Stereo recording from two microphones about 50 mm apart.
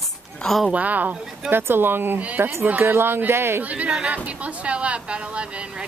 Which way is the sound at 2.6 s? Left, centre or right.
Right.